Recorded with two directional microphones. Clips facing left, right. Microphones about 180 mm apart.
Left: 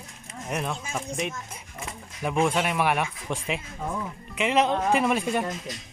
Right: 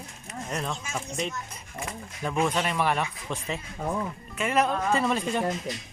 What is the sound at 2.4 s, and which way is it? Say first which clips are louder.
Speech: left 2 dB; 10° left (ahead or behind).